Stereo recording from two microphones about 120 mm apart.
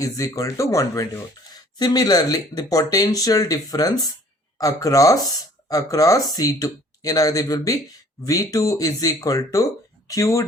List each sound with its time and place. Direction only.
0.0 s speech: 30° left (ahead or behind)